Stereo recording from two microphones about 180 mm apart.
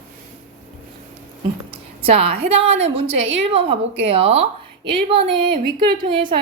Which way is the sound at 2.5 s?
35° right (ahead or behind).